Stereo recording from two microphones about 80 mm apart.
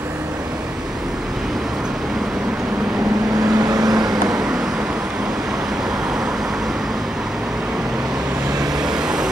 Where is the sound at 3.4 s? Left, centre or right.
Right.